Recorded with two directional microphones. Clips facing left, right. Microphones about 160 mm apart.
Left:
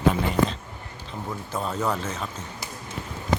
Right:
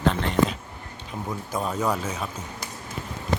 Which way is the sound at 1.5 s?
10° right (ahead or behind).